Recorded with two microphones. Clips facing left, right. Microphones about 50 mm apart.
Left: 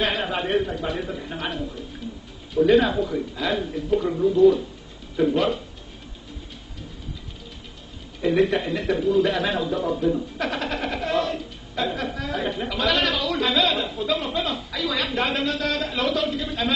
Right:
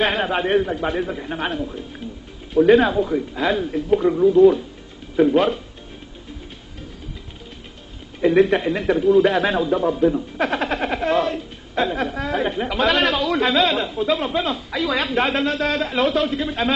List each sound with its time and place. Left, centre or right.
0.0 s speech: right
1.0 s speech: right
8.2 s speech: right
9.7 s a sound: right
13.9 s speech: right